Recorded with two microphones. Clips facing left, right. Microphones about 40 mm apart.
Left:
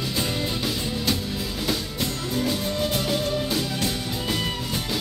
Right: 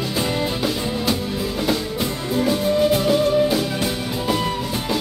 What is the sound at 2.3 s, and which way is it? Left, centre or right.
Music, centre.